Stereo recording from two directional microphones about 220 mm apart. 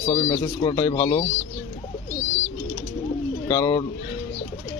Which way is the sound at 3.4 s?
15° left (ahead or behind).